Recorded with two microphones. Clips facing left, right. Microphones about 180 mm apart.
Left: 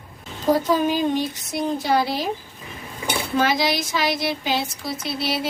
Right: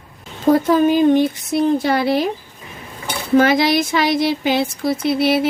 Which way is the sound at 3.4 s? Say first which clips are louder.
Right 6 dB; 60° right (ahead or behind).